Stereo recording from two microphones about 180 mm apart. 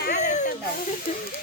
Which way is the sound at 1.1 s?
50° left (ahead or behind).